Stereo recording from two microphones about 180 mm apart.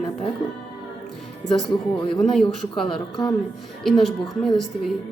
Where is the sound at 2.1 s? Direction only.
Centre (ahead or behind).